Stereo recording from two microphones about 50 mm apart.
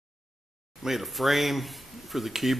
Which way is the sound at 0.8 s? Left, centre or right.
Centre.